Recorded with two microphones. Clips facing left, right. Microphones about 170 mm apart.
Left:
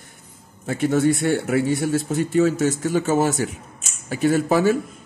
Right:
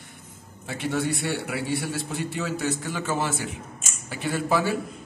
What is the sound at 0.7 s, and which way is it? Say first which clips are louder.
A man's voice: left 8 dB; 45° left (ahead or behind).